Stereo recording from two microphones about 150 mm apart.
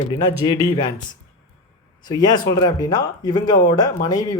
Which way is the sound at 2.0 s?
25° left (ahead or behind).